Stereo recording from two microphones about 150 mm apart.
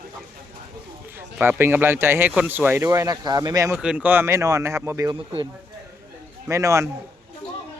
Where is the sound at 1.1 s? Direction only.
15° right (ahead or behind).